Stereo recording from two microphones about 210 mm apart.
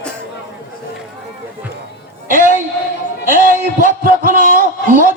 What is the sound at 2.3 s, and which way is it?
Music, 40° right (ahead or behind).